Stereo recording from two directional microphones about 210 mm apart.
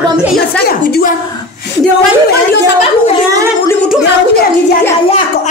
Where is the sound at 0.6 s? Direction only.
45° left (ahead or behind).